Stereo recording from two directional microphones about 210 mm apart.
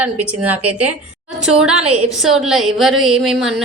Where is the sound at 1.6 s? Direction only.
5° right (ahead or behind).